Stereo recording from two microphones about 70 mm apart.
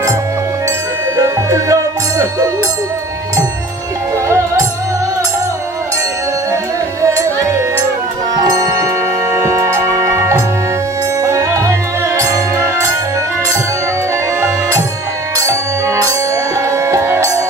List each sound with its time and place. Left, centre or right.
1.1 s music: right
8.4 s music: right
9.5 s music: right
16.7 s music: right